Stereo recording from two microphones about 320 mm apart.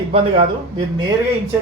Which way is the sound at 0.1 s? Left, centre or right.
Centre.